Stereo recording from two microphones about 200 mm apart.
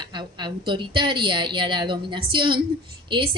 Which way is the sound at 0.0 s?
25° right (ahead or behind).